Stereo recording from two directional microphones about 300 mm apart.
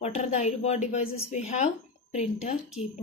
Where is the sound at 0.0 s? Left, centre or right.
Left.